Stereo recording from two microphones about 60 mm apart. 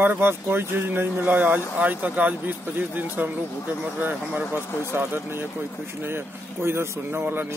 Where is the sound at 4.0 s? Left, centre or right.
Right.